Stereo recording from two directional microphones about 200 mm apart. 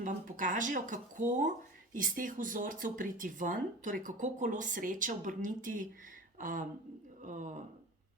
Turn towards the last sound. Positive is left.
turn(degrees=-40)  # may be behind; listen again after turning